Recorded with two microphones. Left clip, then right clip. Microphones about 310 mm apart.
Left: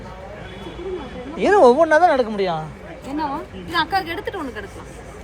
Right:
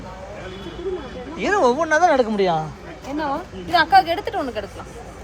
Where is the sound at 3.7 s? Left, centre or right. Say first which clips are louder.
Right 6 dB; right.